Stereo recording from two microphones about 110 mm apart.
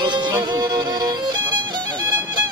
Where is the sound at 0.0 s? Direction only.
45° right (ahead or behind).